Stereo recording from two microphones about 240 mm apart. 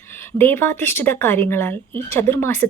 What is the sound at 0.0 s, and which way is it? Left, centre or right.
A woman's voice, centre.